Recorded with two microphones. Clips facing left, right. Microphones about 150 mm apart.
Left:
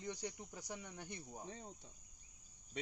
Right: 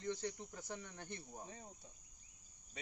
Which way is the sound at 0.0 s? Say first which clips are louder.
Right 3 dB; 15° left (ahead or behind).